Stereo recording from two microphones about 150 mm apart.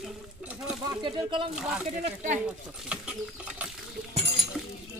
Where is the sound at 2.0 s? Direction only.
55° right (ahead or behind).